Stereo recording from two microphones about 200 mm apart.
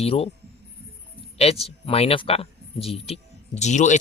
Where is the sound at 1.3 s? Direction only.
30° left (ahead or behind).